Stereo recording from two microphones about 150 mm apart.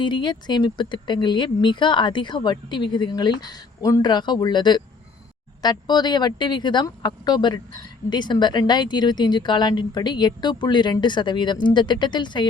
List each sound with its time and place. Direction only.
0.0 s speech: 30° left (ahead or behind)